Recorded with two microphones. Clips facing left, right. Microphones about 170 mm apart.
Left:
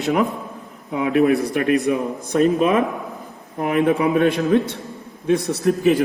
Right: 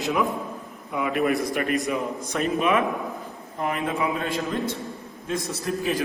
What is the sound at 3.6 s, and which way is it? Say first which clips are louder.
A man's voice: left 8 dB; 65° left (ahead or behind).